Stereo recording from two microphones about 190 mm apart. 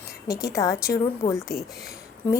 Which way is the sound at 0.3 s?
15° left (ahead or behind).